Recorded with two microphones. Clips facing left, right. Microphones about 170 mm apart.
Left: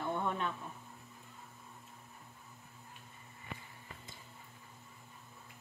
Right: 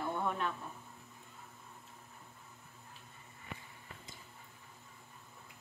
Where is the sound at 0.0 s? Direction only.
5° right (ahead or behind).